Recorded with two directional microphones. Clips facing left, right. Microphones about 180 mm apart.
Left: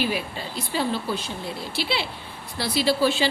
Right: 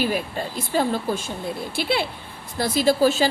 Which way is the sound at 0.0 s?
45° right (ahead or behind).